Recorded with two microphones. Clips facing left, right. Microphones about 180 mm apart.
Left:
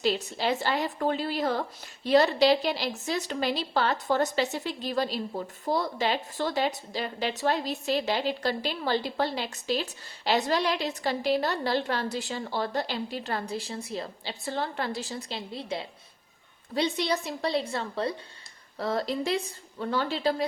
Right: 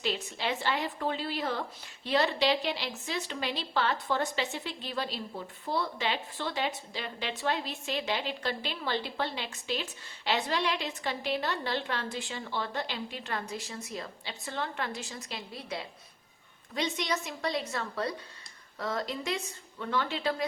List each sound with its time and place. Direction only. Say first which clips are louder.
0.0 s a woman's voice: left 6 dB; 40° left (ahead or behind)